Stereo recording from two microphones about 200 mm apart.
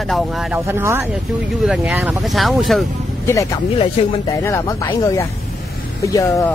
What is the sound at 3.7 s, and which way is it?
Speech, 25° left (ahead or behind).